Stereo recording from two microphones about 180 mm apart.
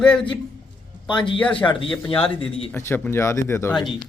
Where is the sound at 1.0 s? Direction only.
25° left (ahead or behind).